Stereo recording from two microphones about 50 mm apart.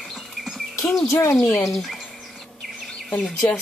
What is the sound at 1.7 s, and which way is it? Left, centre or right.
Speech, centre.